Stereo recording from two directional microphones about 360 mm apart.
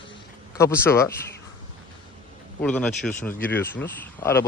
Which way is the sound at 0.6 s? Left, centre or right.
Centre.